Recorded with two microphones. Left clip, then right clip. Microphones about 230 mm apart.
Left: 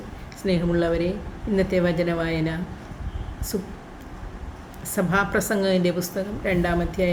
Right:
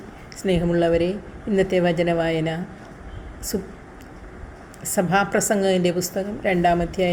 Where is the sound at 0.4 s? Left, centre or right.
Centre.